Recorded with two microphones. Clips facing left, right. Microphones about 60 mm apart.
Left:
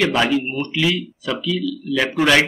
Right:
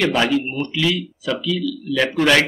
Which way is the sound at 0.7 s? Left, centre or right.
Centre.